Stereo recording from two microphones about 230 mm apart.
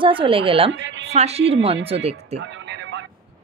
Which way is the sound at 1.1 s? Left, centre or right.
Right.